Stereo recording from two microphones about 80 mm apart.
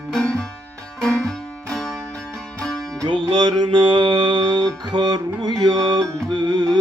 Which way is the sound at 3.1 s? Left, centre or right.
Right.